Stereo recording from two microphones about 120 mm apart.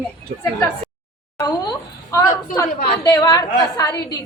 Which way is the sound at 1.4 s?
35° left (ahead or behind).